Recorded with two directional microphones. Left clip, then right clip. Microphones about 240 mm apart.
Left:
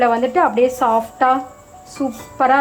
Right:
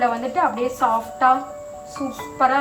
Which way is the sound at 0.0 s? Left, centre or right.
Centre.